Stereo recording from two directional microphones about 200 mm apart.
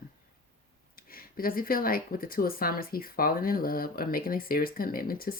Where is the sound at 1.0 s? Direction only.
45° left (ahead or behind).